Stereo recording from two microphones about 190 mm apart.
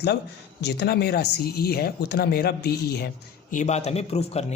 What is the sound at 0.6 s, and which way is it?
Speech, 60° left (ahead or behind).